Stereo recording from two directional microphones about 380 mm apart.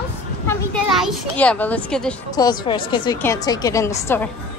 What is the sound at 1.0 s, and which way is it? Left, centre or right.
A woman's voice, centre.